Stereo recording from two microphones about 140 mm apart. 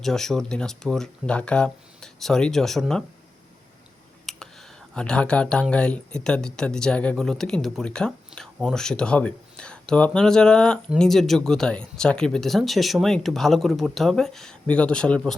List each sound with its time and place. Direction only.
0.0 s speech: 5° left (ahead or behind)
4.3 s a sound: centre (ahead or behind)
4.9 s speech: 5° left (ahead or behind)